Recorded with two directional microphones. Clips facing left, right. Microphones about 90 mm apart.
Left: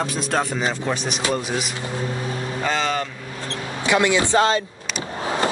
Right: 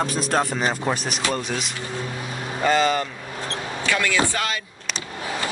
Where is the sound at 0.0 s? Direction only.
Centre (ahead or behind).